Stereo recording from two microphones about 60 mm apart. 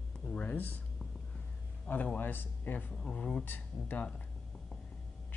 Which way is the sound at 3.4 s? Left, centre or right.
Left.